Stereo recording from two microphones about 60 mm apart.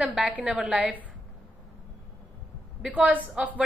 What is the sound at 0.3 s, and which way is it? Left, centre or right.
Speech, right.